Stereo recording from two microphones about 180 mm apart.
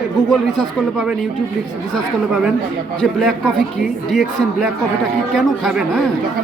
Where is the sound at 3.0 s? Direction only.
Centre (ahead or behind).